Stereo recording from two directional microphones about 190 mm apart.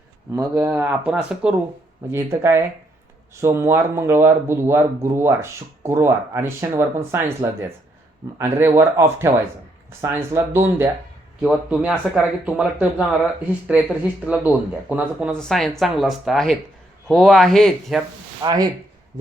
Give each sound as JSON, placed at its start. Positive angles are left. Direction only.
{"t": 0.3, "sound": "speech", "side_deg": -10}
{"t": 18.4, "sound": "speech", "side_deg": -20}